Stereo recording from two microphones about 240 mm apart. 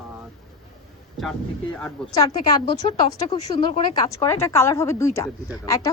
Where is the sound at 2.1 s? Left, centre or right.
Centre.